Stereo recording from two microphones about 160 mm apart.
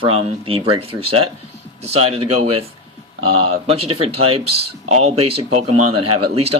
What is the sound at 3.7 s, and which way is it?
Speech, 35° right (ahead or behind).